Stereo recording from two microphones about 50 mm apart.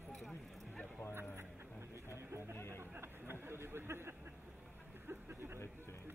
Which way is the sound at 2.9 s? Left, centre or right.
Right.